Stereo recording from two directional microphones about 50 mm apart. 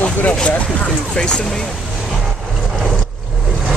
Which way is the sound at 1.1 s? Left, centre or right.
Centre.